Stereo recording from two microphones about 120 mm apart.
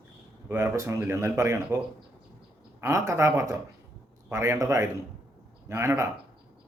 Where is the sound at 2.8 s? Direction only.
25° right (ahead or behind).